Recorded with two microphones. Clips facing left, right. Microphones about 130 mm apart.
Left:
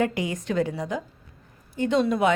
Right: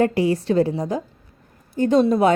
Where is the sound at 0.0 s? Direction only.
35° right (ahead or behind).